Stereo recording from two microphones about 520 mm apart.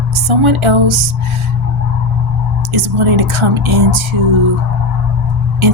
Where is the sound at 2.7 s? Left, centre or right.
Right.